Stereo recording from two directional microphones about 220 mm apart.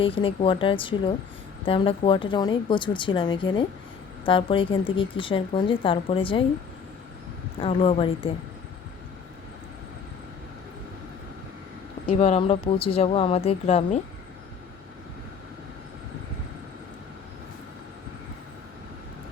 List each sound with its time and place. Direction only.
0.0 s a woman's voice: 25° left (ahead or behind)
7.6 s a woman's voice: 25° left (ahead or behind)
12.0 s a woman's voice: 30° left (ahead or behind)